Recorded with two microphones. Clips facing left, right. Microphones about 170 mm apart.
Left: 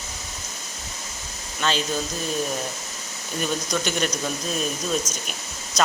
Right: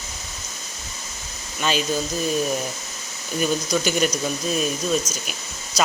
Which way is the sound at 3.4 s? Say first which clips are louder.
Right 4 dB; 5° right (ahead or behind).